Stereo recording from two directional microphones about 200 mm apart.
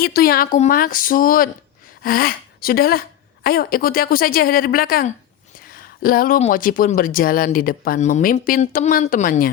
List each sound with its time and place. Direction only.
0.0 s speech: 50° left (ahead or behind)